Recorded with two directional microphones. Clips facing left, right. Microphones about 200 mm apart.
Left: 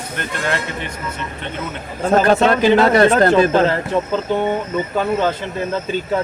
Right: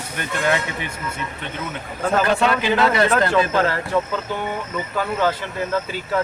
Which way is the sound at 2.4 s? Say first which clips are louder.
Left 6 dB; 40° left (ahead or behind).